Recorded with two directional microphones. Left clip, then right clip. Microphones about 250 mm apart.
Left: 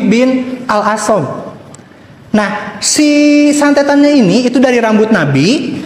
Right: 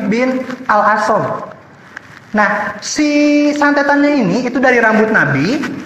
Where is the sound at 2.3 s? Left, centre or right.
Left.